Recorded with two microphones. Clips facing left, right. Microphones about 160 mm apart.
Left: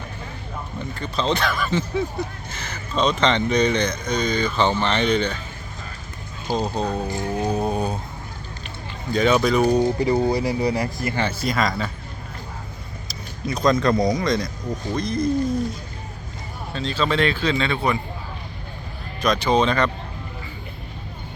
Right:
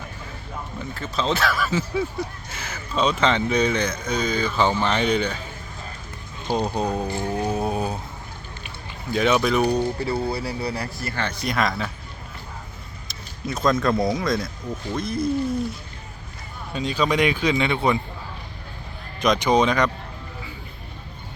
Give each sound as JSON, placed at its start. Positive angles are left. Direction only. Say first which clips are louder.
{"t": 0.9, "sound": "speech", "louder": "left 1 dB", "side_deg": -5}
{"t": 6.7, "sound": "speech", "louder": "even", "side_deg": -10}
{"t": 7.3, "sound": "music", "louder": "left 2 dB", "side_deg": -5}
{"t": 9.1, "sound": "speech", "louder": "left 2 dB", "side_deg": 0}
{"t": 9.7, "sound": "speech", "louder": "left 5 dB", "side_deg": 15}
{"t": 11.3, "sound": "speech", "louder": "left 1 dB", "side_deg": 0}
{"t": 13.1, "sound": "speech", "louder": "left 2 dB", "side_deg": 0}
{"t": 16.7, "sound": "speech", "louder": "right 1 dB", "side_deg": -15}
{"t": 19.2, "sound": "speech", "louder": "even", "side_deg": -15}